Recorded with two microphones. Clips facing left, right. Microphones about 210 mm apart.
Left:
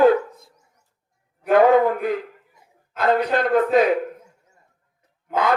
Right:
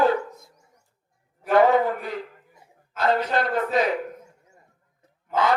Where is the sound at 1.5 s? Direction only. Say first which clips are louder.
Left 3 dB; 50° left (ahead or behind).